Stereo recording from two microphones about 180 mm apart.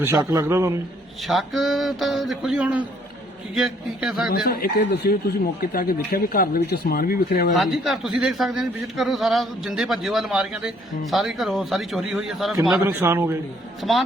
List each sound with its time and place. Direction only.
0.0 s a man's voice: 15° right (ahead or behind)
1.3 s a man's voice: centre (ahead or behind)
4.3 s speech: 55° left (ahead or behind)
7.5 s a man's voice: centre (ahead or behind)
12.7 s a man's voice: 10° right (ahead or behind)